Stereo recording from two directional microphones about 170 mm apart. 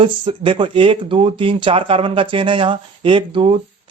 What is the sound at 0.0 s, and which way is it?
Speech, 30° right (ahead or behind).